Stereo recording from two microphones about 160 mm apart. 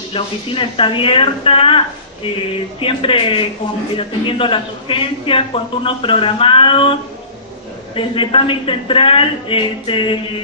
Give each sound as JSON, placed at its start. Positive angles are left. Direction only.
{"t": 0.1, "sound": "a man's voice", "side_deg": 35}